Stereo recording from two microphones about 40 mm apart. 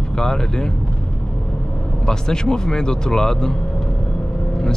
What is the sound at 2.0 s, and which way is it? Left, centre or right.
Speech, centre.